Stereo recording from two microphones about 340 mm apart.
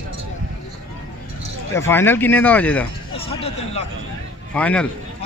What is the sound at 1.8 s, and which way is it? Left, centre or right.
Speech, centre.